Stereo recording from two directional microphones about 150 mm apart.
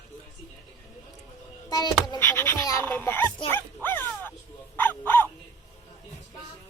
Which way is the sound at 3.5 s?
15° left (ahead or behind).